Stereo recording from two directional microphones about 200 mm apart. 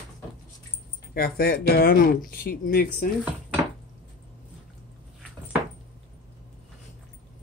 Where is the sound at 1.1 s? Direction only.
50° left (ahead or behind).